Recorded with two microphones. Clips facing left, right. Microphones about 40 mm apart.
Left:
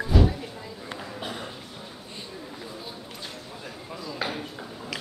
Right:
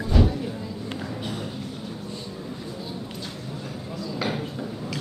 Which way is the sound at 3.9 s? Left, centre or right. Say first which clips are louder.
Right 3 dB; centre.